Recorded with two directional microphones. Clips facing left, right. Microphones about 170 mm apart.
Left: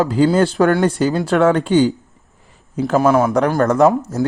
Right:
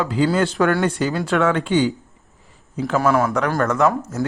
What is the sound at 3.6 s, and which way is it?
Speech, 35° left (ahead or behind).